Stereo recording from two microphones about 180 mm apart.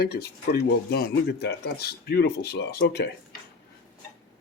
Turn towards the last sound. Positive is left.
turn(degrees=65)  # may be behind; listen again after turning